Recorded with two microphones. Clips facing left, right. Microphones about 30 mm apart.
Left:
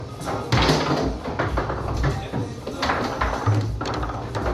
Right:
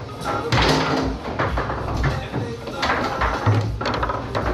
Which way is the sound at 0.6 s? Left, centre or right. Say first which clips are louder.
Right 1 dB; right.